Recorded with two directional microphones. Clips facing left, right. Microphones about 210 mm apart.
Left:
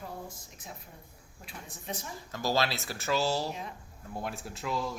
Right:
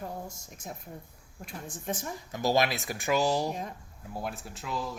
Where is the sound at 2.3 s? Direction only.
20° right (ahead or behind).